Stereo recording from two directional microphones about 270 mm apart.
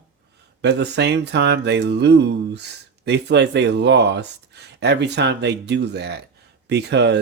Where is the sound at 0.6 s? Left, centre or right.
Right.